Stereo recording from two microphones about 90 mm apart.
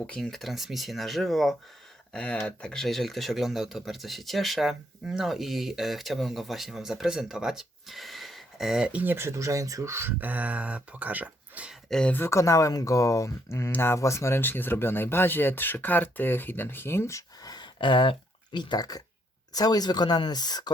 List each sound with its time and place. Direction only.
0.0 s speech: 5° left (ahead or behind)
8.9 s speech: 15° right (ahead or behind)
9.1 s speech: 30° right (ahead or behind)
11.7 s a sound: 5° left (ahead or behind)
12.1 s speech: 30° left (ahead or behind)
13.7 s speech: 20° left (ahead or behind)
13.9 s speech: 35° left (ahead or behind); by 20.7 s 50° left (ahead or behind)